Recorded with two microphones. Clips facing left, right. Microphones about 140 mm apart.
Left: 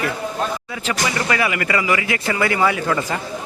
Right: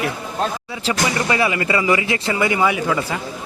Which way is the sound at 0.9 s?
25° right (ahead or behind).